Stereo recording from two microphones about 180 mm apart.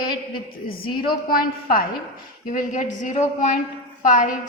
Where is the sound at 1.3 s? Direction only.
55° left (ahead or behind).